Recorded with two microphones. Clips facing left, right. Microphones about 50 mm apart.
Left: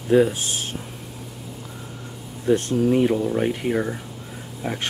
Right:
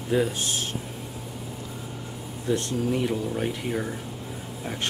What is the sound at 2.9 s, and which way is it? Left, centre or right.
Speech, left.